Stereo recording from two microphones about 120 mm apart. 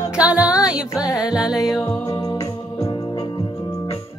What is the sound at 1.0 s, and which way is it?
Music, 30° left (ahead or behind).